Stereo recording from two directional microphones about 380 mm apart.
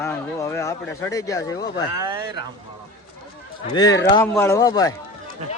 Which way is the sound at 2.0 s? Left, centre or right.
Centre.